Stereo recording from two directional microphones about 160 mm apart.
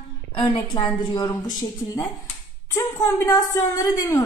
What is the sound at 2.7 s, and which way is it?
A woman's voice, 20° left (ahead or behind).